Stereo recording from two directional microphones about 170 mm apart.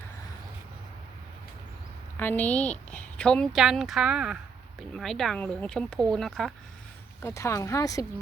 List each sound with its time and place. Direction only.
2.1 s a woman's voice: 10° left (ahead or behind)
7.2 s speech: 15° left (ahead or behind)